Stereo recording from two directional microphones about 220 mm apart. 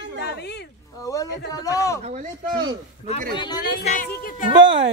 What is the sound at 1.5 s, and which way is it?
Speech, 15° left (ahead or behind).